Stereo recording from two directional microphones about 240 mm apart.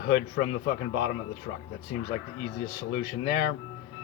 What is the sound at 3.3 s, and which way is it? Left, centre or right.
Speech, left.